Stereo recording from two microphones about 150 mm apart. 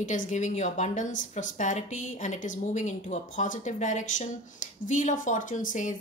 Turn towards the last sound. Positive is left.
turn(degrees=60)  # may be behind; listen again after turning